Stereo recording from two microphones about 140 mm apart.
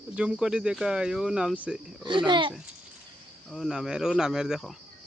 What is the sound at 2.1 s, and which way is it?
Speech, 35° right (ahead or behind).